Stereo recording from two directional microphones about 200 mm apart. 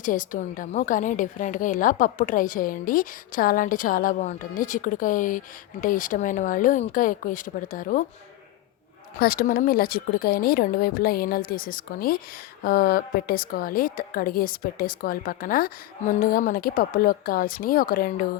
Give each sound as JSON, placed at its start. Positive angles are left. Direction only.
{"t": 0.0, "sound": "a woman's voice", "side_deg": 40}
{"t": 9.1, "sound": "a woman's voice", "side_deg": 50}